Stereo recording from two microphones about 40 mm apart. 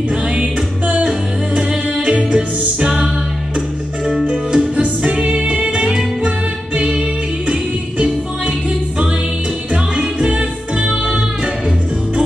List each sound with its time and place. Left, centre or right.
0.1 s music: right
1.5 s music: right
4.3 s music: centre; by 6.9 s right
10.2 s music: right